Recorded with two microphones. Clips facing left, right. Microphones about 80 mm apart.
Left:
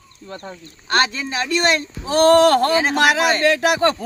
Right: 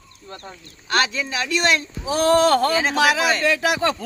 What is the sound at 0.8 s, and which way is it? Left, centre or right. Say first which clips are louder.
Speech: left 2 dB; left.